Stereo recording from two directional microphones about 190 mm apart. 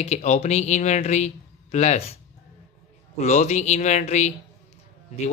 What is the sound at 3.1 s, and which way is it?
Speech, 35° left (ahead or behind).